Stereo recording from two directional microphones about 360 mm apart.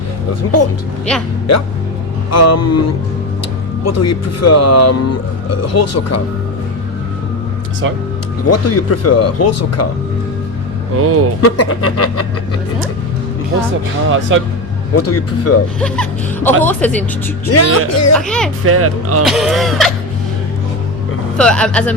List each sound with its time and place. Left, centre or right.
0.4 s speech: left
2.3 s speech: left
3.8 s speech: left
8.4 s speech: left
10.9 s speech: right
11.3 s speech: left
14.1 s speech: right
14.9 s speech: left
15.8 s speech: centre
17.5 s speech: left
18.2 s speech: centre
18.6 s speech: right
19.2 s speech: centre
21.3 s speech: centre